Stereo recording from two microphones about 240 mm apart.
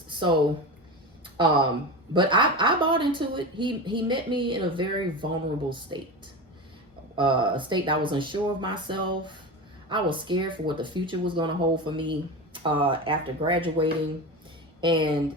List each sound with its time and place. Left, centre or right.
0.1 s a sound: centre
1.4 s speech: centre
7.2 s speech: centre